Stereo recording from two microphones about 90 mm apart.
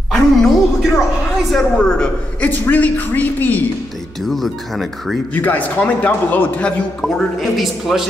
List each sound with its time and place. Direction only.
0.1 s music: 5° left (ahead or behind)
1.5 s speech: centre (ahead or behind)
2.4 s a man's voice: 20° left (ahead or behind)
4.3 s speech: centre (ahead or behind)
5.3 s a man's voice: 20° left (ahead or behind)
7.0 s speech: 5° left (ahead or behind)